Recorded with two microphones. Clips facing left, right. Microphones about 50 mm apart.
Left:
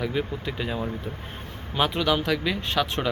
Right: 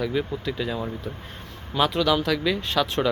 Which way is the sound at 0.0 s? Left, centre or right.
Centre.